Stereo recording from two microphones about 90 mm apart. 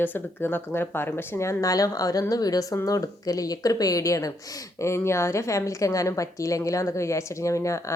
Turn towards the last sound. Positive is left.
turn(degrees=35)  # may be behind; listen again after turning